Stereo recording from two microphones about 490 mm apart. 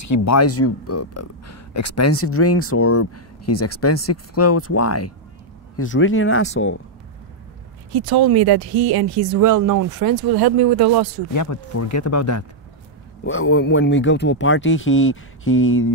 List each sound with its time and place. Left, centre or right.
0.0 s speech: left
7.9 s speech: right
11.3 s speech: left